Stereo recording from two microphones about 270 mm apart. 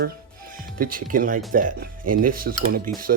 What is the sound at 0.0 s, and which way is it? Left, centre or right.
Music, right.